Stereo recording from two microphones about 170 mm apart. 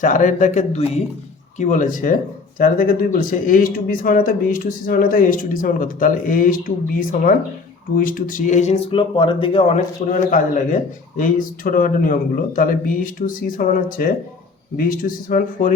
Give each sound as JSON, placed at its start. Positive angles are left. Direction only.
{"t": 0.0, "sound": "speech", "side_deg": 50}